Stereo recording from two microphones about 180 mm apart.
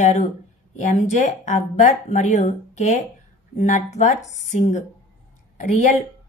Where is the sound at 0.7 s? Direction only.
40° left (ahead or behind).